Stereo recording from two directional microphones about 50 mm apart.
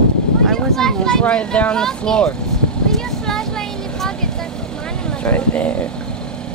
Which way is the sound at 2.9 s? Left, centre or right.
Centre.